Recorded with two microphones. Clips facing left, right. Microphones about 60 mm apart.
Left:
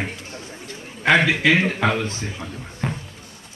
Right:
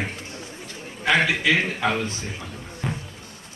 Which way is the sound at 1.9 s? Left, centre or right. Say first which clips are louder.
Left 2 dB; left.